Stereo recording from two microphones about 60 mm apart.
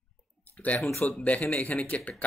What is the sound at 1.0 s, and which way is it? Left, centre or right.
Speech, left.